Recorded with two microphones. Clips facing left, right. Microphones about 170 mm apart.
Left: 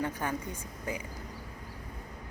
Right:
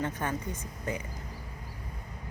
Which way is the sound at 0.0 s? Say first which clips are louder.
Right 1 dB; 10° left (ahead or behind).